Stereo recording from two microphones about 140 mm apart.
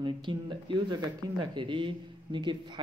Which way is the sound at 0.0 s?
35° right (ahead or behind).